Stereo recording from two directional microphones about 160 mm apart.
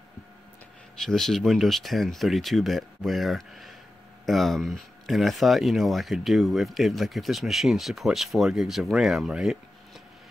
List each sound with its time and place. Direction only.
1.0 s speech: 5° left (ahead or behind)